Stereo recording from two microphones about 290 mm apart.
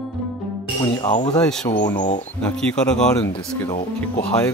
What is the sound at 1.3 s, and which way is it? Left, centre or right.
Speech, centre.